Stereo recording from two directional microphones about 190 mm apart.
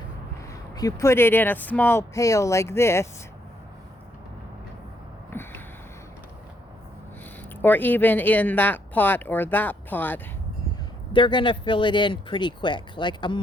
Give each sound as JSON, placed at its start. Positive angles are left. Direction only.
{"t": 0.8, "sound": "speech", "side_deg": 15}
{"t": 5.3, "sound": "a sound", "side_deg": 10}
{"t": 7.6, "sound": "speech", "side_deg": 10}
{"t": 11.1, "sound": "speech", "side_deg": 25}